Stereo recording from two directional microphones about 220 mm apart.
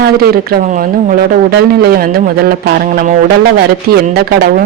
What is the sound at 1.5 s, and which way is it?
Speech, 45° right (ahead or behind).